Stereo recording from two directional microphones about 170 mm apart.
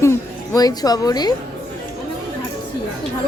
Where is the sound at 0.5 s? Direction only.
20° left (ahead or behind).